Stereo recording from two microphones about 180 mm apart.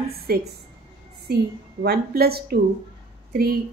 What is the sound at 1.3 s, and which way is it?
Speech, 60° right (ahead or behind).